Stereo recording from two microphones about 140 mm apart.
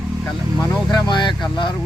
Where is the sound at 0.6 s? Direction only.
30° left (ahead or behind).